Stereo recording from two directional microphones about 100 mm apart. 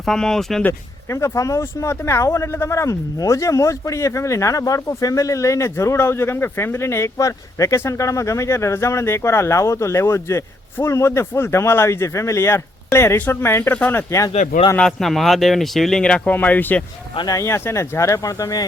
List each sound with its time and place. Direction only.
0.0 s speech: 5° left (ahead or behind)
0.7 s speech: 30° left (ahead or behind)
14.8 s speech: 5° left (ahead or behind); by 18.6 s 35° left (ahead or behind)